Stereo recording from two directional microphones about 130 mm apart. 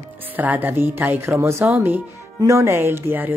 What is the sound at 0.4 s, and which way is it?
Speech, 15° right (ahead or behind).